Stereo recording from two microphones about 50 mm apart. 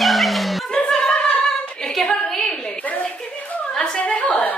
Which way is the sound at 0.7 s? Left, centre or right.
Centre.